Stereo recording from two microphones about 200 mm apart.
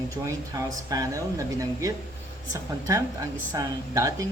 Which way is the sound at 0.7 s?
20° right (ahead or behind).